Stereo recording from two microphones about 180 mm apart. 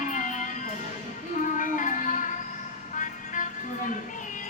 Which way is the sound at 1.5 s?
45° left (ahead or behind).